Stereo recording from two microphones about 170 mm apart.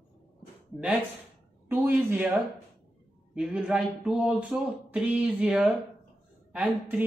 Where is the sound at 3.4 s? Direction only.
5° right (ahead or behind).